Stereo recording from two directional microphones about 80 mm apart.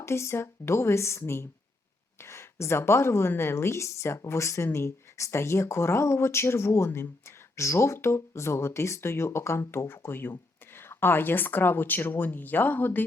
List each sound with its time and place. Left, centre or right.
0.0 s a woman's voice: left